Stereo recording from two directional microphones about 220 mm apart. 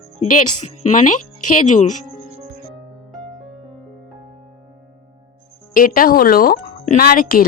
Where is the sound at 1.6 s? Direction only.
35° left (ahead or behind).